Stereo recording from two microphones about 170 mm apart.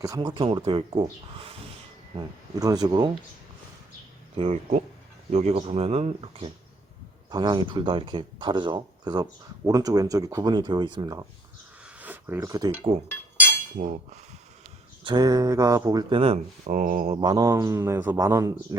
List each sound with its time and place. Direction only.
0.0 s speech: 25° right (ahead or behind)
2.6 s speech: 20° right (ahead or behind)
4.4 s speech: 40° right (ahead or behind)
7.3 s speech: 25° right (ahead or behind)
11.9 s a sound: 10° right (ahead or behind)
13.7 s speech: 45° right (ahead or behind)
15.0 s speech: 25° right (ahead or behind)
16.7 s speech: 50° right (ahead or behind)
17.2 s speech: 20° right (ahead or behind)